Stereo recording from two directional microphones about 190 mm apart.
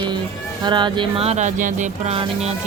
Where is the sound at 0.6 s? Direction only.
25° right (ahead or behind).